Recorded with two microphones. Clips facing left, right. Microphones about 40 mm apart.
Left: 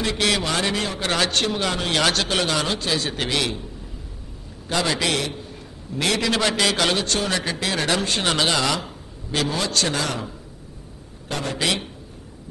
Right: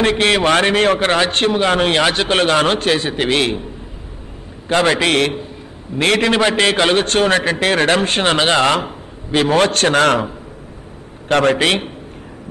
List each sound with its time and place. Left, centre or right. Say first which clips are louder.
0.0 s a man's voice: right 8 dB; right
2.3 s a man's voice: right 8 dB; right
3.0 s a man's voice: right 7 dB; right
3.3 s a man's voice: right 9 dB; right
4.6 s a man's voice: right 8 dB; right
9.5 s a man's voice: right 13 dB; right
11.6 s a man's voice: right 7 dB; right